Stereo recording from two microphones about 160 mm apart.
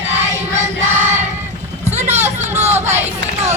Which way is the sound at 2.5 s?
45° right (ahead or behind).